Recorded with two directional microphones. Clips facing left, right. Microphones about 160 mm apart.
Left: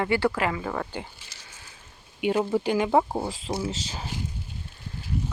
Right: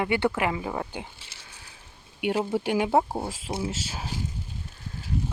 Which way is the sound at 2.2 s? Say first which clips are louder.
Left 2 dB; 10° right (ahead or behind).